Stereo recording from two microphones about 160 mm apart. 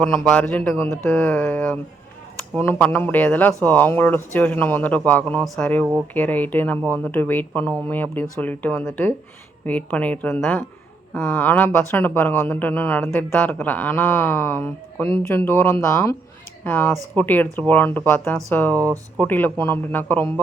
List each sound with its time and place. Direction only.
0.0 s speech: 5° left (ahead or behind)
18.8 s speech: 20° right (ahead or behind)
19.2 s speech: 10° left (ahead or behind)